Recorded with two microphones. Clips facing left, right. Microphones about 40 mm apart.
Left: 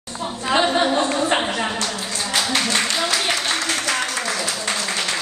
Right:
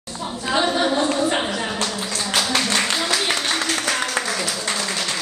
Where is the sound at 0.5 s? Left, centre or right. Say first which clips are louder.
Left 2 dB; left.